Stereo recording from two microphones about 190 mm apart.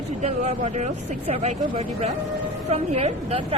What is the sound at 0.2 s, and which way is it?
A woman's voice, 40° right (ahead or behind).